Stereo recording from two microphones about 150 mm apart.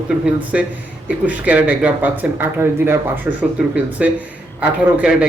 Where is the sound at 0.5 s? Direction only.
5° right (ahead or behind).